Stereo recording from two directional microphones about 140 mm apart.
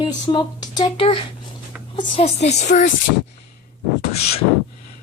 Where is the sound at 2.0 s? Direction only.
45° left (ahead or behind).